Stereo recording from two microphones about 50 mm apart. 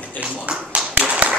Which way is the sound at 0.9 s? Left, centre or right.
Right.